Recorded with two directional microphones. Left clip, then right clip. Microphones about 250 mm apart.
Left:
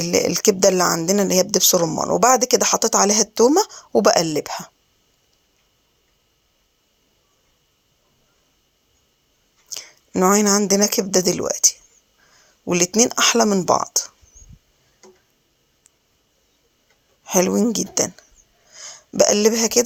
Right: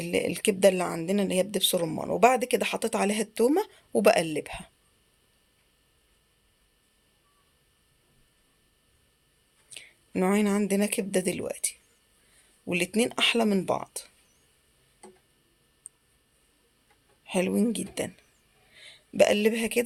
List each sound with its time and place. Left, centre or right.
0.0 s speech: centre
9.7 s speech: centre
17.2 s speech: centre